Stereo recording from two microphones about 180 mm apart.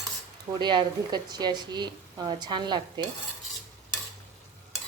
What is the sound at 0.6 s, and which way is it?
A woman's voice, 25° right (ahead or behind).